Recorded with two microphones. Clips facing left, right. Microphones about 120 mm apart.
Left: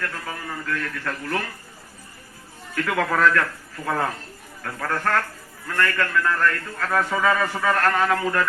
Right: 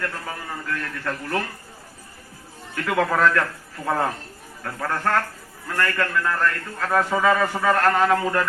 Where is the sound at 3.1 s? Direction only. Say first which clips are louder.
Even; 25° right (ahead or behind).